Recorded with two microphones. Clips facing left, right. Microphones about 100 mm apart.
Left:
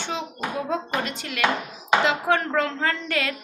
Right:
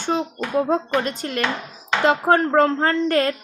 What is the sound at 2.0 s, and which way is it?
Speech, 40° right (ahead or behind).